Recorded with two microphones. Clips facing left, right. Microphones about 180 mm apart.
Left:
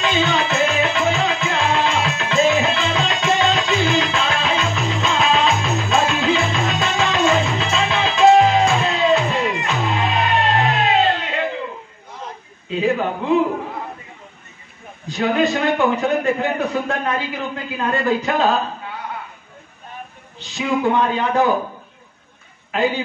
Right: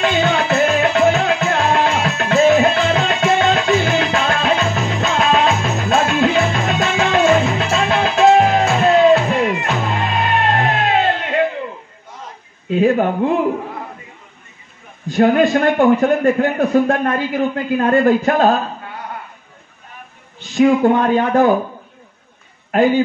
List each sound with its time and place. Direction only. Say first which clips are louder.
0.0 s music: right 3 dB; 55° right (ahead or behind)
12.6 s speech: right 5 dB; 50° right (ahead or behind)
15.0 s a man's voice: right 5 dB; 50° right (ahead or behind)
20.3 s a man's voice: right 9 dB; 50° right (ahead or behind)
22.7 s a man's voice: right 7 dB; 50° right (ahead or behind)